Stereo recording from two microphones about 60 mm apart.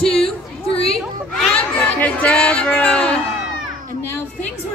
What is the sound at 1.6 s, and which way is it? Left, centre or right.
Chatter, left.